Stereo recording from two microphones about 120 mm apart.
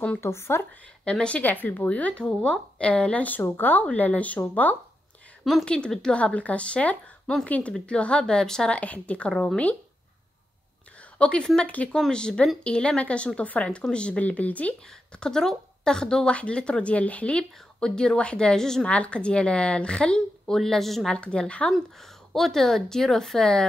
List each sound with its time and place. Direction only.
0.0 s speech: 15° left (ahead or behind)
1.0 s speech: 10° left (ahead or behind)
5.4 s speech: centre (ahead or behind)
11.1 s speech: 10° left (ahead or behind)